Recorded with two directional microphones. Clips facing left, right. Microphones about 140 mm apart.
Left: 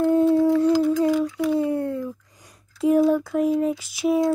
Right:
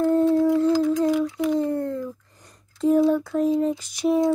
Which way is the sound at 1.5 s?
10° left (ahead or behind).